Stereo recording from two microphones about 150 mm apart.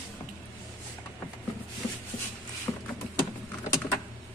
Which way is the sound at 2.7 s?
20° left (ahead or behind).